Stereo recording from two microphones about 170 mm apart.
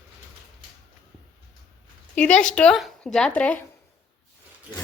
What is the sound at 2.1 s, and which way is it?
Speech, 5° left (ahead or behind).